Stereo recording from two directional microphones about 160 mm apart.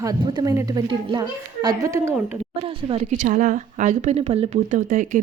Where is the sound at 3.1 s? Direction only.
55° right (ahead or behind).